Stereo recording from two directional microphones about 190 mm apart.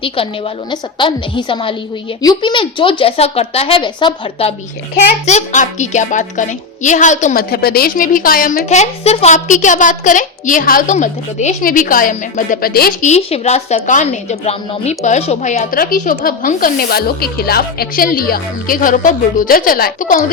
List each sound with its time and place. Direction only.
0.0 s a woman's voice: 30° left (ahead or behind)
5.2 s a woman's voice: 40° left (ahead or behind)
13.1 s a woman's voice: 35° left (ahead or behind)